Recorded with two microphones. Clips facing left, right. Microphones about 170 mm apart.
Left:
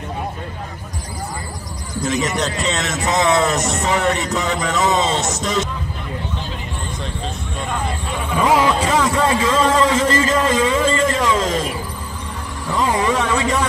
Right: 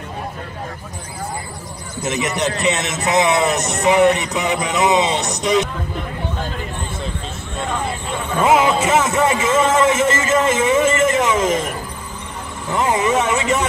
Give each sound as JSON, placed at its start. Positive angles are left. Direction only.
{"t": 2.0, "sound": "speech", "side_deg": -20}
{"t": 8.5, "sound": "a sound", "side_deg": -25}
{"t": 12.6, "sound": "speech", "side_deg": -20}